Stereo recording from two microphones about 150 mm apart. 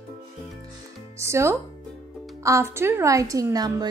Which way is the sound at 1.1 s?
20° right (ahead or behind).